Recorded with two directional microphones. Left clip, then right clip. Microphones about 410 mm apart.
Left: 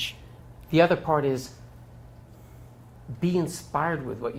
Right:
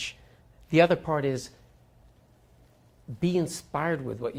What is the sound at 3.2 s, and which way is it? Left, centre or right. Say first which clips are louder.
Speech: left 1 dB; right.